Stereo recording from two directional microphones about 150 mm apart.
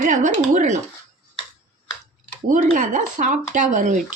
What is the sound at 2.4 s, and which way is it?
Speech, 55° right (ahead or behind).